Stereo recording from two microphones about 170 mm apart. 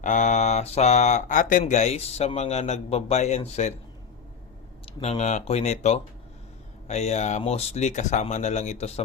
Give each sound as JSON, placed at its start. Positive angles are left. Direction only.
{"t": 0.0, "sound": "speech", "side_deg": 45}
{"t": 4.9, "sound": "speech", "side_deg": 40}